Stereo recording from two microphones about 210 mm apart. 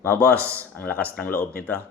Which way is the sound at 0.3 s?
10° right (ahead or behind).